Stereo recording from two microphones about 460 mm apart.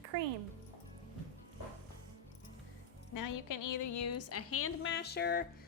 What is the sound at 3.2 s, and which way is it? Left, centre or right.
A woman's voice, left.